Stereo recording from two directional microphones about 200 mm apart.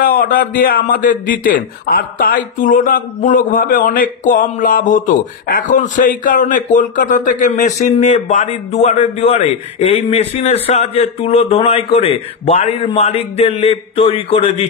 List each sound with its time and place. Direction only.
0.0 s a man's voice: 45° left (ahead or behind); by 14.4 s 30° left (ahead or behind)